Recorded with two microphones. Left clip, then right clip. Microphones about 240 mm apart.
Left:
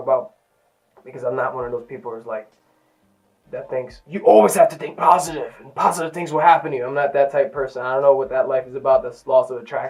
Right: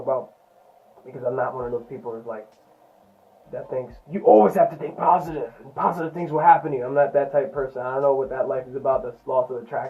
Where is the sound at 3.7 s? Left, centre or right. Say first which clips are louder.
Left 3 dB; centre.